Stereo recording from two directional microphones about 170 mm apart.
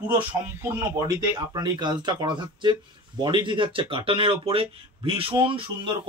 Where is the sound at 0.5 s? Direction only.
15° right (ahead or behind).